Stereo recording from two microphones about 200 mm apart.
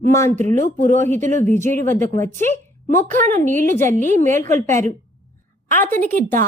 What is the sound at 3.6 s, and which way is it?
Speech, 10° left (ahead or behind).